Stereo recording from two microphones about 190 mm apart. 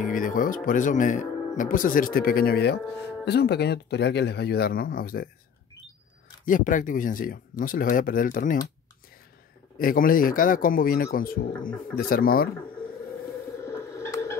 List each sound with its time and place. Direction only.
0.0 s speech: 45° left (ahead or behind)
6.4 s speech: 45° left (ahead or behind)
9.8 s speech: 50° left (ahead or behind)
13.6 s a sound: 15° left (ahead or behind)